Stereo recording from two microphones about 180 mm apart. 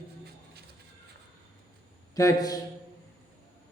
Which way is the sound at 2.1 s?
20° left (ahead or behind).